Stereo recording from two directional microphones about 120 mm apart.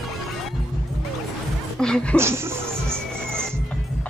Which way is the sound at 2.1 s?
20° right (ahead or behind).